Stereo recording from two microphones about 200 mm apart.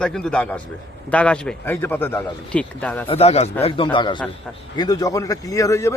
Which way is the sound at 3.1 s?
30° left (ahead or behind).